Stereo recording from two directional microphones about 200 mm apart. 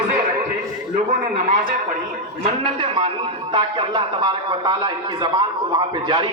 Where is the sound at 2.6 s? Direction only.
25° right (ahead or behind).